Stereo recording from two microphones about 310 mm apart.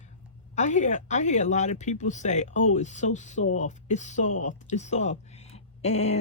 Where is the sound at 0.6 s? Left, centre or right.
Left.